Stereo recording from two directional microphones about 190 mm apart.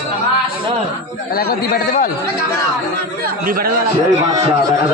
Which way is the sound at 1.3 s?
55° left (ahead or behind).